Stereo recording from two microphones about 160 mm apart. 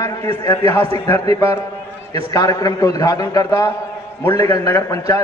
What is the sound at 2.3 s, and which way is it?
A man's voice, 20° left (ahead or behind).